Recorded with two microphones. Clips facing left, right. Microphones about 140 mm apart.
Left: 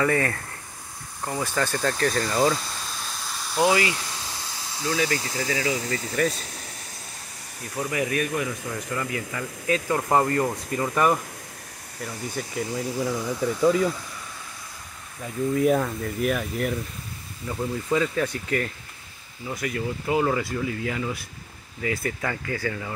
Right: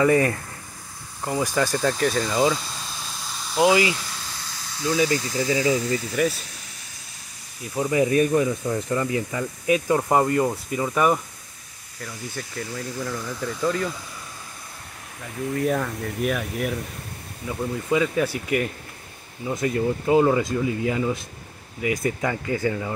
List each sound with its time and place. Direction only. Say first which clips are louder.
0.0 s speech: right 5 dB; 20° right (ahead or behind); by 2.6 s 5° right (ahead or behind)
3.5 s speech: right 3 dB; 20° right (ahead or behind)
4.9 s speech: right 4 dB; 20° right (ahead or behind)
6.2 s speech: right 1 dB; 10° right (ahead or behind)
7.7 s speech: right 6 dB; 25° right (ahead or behind); by 11.1 s 5° right (ahead or behind)
12.0 s speech: left 2 dB; 5° left (ahead or behind)
15.5 s speech: left 2 dB; 5° left (ahead or behind); by 18.7 s 10° right (ahead or behind)
19.4 s speech: right 6 dB; 25° right (ahead or behind)